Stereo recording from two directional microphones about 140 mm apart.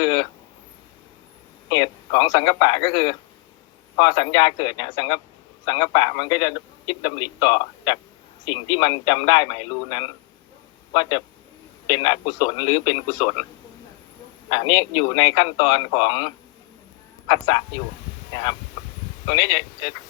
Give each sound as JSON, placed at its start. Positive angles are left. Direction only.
{"t": 0.0, "sound": "a man's voice", "side_deg": 35}
{"t": 1.7, "sound": "a man's voice", "side_deg": 35}
{"t": 14.5, "sound": "a man's voice", "side_deg": 35}
{"t": 19.3, "sound": "a man's voice", "side_deg": 35}